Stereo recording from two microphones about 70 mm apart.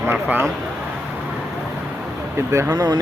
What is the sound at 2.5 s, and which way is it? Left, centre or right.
Speech, right.